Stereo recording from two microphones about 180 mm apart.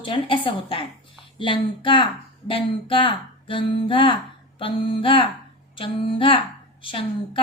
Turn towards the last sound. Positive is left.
turn(degrees=30)  # may be behind; listen again after turning